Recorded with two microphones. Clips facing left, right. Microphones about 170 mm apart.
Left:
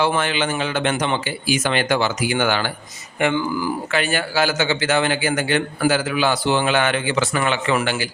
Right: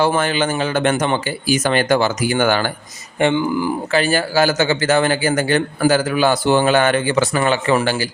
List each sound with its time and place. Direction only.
0.0 s speech: 40° right (ahead or behind)
3.2 s speech: 25° right (ahead or behind)
3.9 s a man's voice: 35° right (ahead or behind)